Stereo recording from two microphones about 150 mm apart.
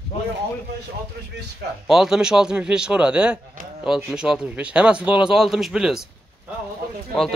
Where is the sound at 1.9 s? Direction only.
Centre (ahead or behind).